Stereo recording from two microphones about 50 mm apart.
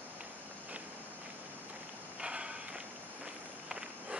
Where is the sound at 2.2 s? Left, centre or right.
Centre.